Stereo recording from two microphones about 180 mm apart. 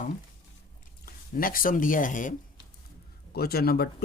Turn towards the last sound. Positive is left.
turn(degrees=60)  # may be behind; listen again after turning